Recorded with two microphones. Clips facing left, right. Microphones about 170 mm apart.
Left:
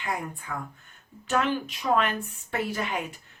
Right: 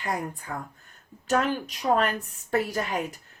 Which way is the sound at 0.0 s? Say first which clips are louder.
Right 2 dB; 40° right (ahead or behind).